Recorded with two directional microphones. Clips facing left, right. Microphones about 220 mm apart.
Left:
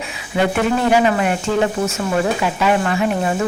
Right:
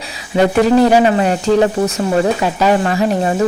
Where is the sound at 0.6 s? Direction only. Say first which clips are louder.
Right 6 dB; 35° right (ahead or behind).